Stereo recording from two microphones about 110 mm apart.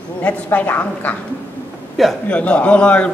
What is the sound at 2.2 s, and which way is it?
Speech, 10° left (ahead or behind).